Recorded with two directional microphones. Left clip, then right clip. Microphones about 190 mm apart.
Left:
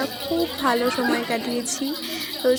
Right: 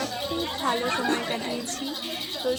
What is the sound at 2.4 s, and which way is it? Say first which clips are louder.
Speech: left 8 dB; 30° left (ahead or behind).